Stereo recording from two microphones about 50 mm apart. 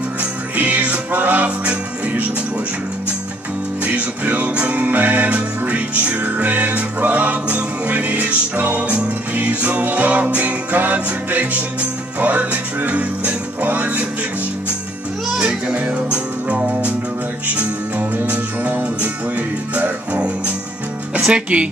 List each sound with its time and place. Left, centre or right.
0.2 s music: right
3.8 s music: right
15.7 s music: right
21.2 s speech: right